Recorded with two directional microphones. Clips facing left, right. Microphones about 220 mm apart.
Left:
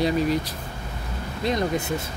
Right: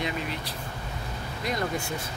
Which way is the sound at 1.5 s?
20° left (ahead or behind).